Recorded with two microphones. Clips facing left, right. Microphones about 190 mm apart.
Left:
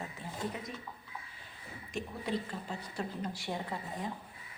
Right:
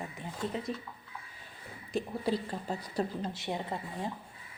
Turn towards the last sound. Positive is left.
turn(degrees=-20)  # may be behind; listen again after turning